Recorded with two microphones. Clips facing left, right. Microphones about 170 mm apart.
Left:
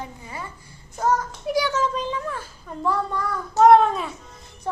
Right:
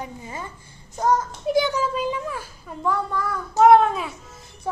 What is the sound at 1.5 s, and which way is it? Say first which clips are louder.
Speech: right 3 dB; 25° right (ahead or behind).